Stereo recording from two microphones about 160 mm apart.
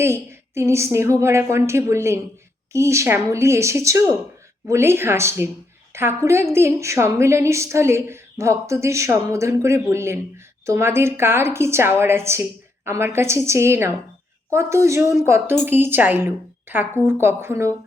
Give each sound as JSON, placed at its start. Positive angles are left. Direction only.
{"t": 0.0, "sound": "a woman's voice", "side_deg": -15}